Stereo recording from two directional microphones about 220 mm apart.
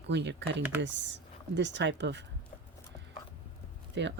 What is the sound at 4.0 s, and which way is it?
Speech, 55° right (ahead or behind).